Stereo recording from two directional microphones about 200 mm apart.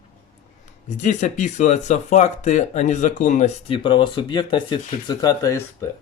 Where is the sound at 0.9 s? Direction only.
35° left (ahead or behind); by 5.6 s 15° left (ahead or behind).